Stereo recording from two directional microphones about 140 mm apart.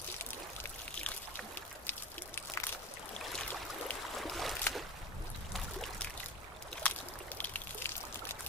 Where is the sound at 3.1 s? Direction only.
5° left (ahead or behind).